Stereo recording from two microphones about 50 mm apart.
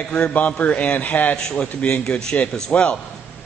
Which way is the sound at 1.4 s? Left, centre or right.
Left.